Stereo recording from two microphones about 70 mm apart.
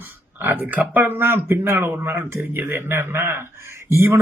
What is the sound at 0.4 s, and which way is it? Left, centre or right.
Speech, right.